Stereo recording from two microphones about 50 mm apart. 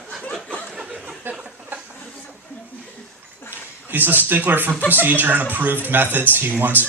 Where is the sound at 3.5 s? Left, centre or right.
Right.